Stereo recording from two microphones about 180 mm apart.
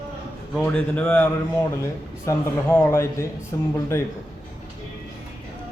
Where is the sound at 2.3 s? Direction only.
15° left (ahead or behind).